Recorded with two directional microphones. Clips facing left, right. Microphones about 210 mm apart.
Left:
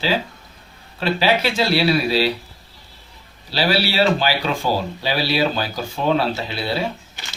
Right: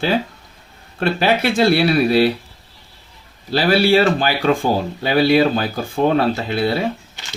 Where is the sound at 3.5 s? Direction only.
50° right (ahead or behind).